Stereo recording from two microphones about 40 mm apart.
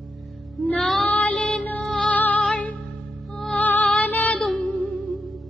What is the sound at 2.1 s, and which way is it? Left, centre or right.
Music, left.